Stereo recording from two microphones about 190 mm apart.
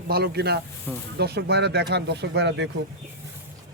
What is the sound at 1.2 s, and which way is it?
Speech, 60° right (ahead or behind).